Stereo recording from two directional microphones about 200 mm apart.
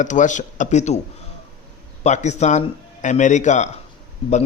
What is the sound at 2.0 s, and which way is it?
Speech, 35° left (ahead or behind).